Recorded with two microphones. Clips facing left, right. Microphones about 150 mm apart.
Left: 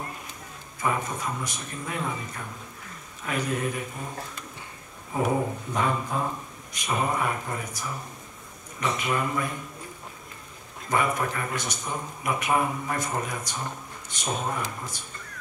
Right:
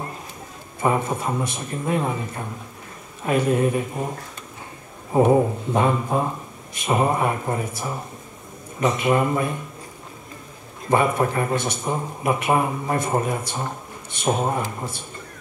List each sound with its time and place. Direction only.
0.7 s speech: 25° right (ahead or behind)
5.1 s speech: 25° right (ahead or behind)
10.9 s speech: 25° right (ahead or behind)